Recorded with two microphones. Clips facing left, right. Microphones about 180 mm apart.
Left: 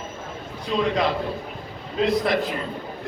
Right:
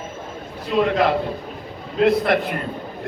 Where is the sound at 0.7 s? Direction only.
5° right (ahead or behind).